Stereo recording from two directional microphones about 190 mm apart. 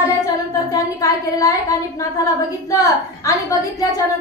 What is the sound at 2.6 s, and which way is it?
Speech, 15° left (ahead or behind).